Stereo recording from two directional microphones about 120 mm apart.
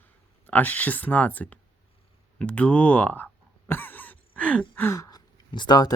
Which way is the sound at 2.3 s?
10° left (ahead or behind).